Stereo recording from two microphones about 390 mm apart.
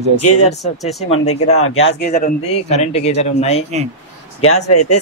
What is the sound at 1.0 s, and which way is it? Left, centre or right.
Speech, centre.